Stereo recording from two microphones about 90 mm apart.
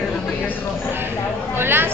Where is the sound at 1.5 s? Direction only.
25° right (ahead or behind).